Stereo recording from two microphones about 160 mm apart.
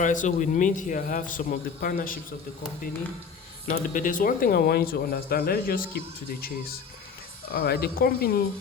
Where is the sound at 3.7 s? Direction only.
55° left (ahead or behind).